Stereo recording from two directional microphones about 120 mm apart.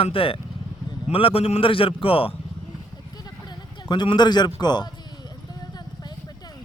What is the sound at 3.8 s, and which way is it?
A man's voice, 40° left (ahead or behind).